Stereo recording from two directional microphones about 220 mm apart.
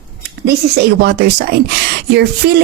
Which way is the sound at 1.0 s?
45° right (ahead or behind).